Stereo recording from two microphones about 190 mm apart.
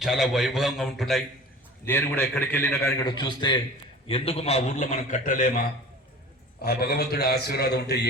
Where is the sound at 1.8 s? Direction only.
10° left (ahead or behind).